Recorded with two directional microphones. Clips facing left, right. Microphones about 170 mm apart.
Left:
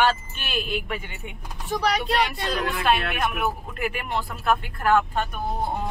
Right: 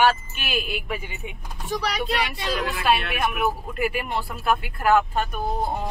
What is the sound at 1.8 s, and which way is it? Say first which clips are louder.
Speech: left 3 dB; 55° left (ahead or behind).